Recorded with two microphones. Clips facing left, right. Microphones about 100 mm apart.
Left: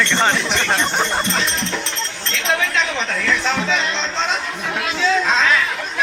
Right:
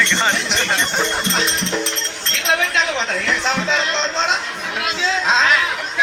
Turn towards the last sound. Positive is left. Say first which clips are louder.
# right 2 dB
turn(degrees=-20)  # may be behind; listen again after turning